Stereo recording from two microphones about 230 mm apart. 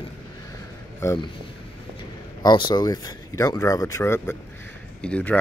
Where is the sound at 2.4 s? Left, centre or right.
Centre.